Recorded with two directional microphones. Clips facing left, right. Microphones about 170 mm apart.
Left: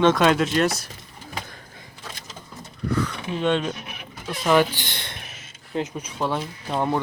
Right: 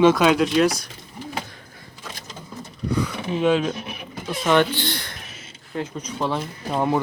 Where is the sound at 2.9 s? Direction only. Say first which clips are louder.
Right 1 dB; 15° right (ahead or behind).